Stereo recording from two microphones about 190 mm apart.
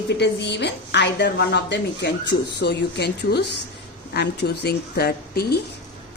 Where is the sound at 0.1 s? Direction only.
65° left (ahead or behind).